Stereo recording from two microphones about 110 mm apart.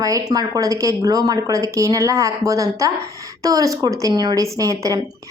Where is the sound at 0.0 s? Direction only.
35° right (ahead or behind).